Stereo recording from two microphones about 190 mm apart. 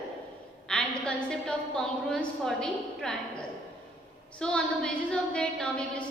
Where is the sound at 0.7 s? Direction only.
5° left (ahead or behind).